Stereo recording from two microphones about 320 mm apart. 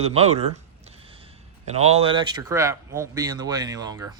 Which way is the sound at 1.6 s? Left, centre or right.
Centre.